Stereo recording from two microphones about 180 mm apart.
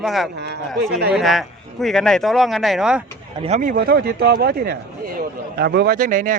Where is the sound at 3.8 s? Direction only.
65° right (ahead or behind).